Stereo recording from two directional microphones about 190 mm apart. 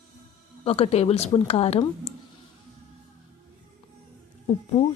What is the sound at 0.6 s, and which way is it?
Speech, 30° left (ahead or behind).